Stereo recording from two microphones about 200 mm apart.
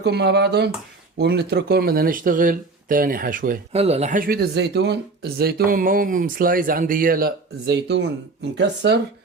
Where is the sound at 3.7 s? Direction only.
30° right (ahead or behind); by 7.4 s 45° right (ahead or behind).